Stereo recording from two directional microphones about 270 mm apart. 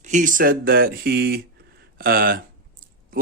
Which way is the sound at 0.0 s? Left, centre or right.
Right.